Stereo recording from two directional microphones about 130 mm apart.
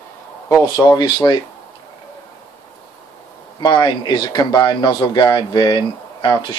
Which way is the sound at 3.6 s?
35° left (ahead or behind).